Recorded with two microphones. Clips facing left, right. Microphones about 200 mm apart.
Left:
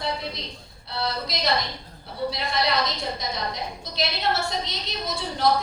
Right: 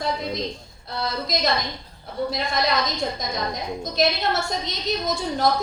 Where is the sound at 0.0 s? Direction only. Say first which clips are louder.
Right 4 dB; 45° right (ahead or behind).